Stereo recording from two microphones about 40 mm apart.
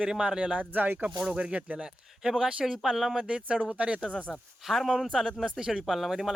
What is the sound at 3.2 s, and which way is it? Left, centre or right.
Speech, right.